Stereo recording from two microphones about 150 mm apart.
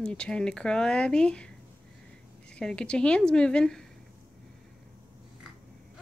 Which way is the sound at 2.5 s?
5° left (ahead or behind).